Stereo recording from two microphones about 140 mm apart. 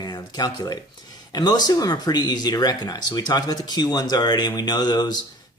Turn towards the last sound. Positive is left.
turn(degrees=30)  # may be behind; listen again after turning